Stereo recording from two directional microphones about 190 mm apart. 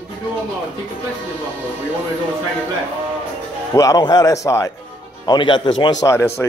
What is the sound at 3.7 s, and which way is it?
A man's voice, 20° left (ahead or behind).